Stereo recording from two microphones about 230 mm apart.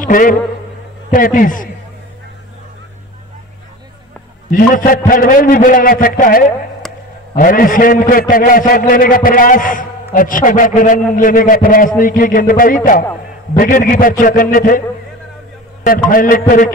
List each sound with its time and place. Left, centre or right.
0.0 s a man's voice: left
4.5 s a man's voice: left
15.8 s a man's voice: left